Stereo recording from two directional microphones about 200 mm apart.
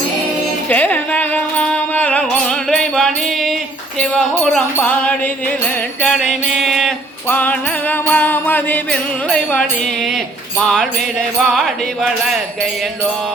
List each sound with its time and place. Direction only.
0.7 s music: 10° left (ahead or behind)